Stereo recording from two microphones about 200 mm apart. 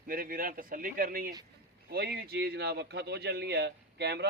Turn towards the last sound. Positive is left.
turn(degrees=-55)  # may be behind; listen again after turning